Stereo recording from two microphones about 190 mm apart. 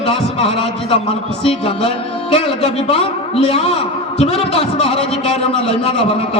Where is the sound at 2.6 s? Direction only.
30° left (ahead or behind).